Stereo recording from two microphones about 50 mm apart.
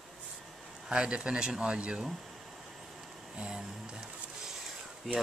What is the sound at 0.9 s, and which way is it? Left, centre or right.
Speech, centre.